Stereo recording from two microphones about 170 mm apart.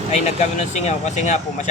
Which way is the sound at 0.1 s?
40° left (ahead or behind).